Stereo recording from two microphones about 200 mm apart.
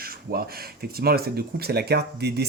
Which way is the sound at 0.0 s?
50° right (ahead or behind).